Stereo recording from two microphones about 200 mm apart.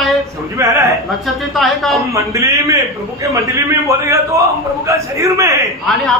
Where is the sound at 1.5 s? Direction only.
Centre (ahead or behind).